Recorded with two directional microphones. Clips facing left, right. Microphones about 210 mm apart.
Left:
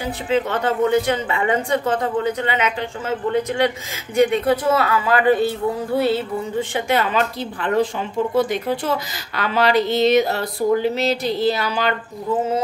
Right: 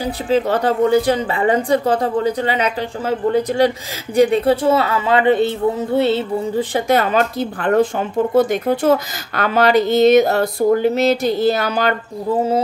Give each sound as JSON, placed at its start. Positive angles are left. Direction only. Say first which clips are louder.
{"t": 0.0, "sound": "a woman's voice", "louder": "right 3 dB", "side_deg": -35}
{"t": 6.7, "sound": "speech", "louder": "right 4 dB", "side_deg": -40}